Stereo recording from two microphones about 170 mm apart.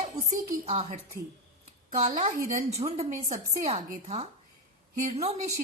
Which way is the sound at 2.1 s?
45° right (ahead or behind).